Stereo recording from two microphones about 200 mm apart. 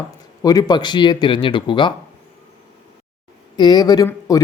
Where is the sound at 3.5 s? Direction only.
20° left (ahead or behind).